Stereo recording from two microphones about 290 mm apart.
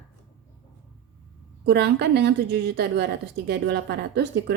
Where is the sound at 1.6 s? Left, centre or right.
Right.